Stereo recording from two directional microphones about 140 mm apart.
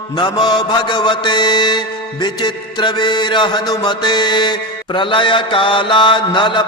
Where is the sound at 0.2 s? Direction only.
30° left (ahead or behind).